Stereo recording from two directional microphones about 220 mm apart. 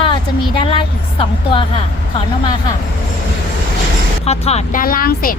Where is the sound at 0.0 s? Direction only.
20° left (ahead or behind).